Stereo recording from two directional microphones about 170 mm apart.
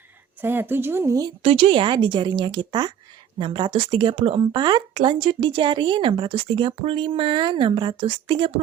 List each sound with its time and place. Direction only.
0.4 s speech: 10° right (ahead or behind)
1.4 s speech: 35° right (ahead or behind)